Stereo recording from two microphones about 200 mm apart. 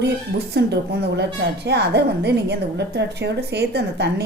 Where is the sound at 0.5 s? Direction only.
60° right (ahead or behind).